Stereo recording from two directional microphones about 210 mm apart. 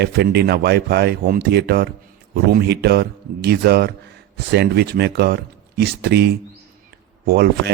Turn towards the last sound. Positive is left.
turn(degrees=-50)  # may be behind; listen again after turning